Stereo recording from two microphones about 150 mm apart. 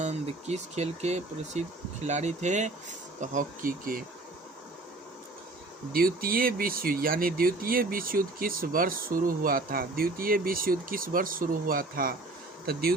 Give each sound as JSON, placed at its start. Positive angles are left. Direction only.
{"t": 0.0, "sound": "speech", "side_deg": -50}
{"t": 5.9, "sound": "speech", "side_deg": -75}